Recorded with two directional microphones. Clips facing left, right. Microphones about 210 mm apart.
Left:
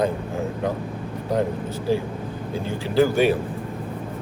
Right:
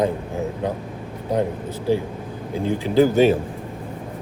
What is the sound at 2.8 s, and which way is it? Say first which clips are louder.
Speech: right 2 dB; 20° right (ahead or behind).